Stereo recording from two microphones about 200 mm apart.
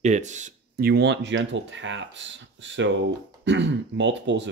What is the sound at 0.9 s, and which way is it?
Speech, 60° right (ahead or behind).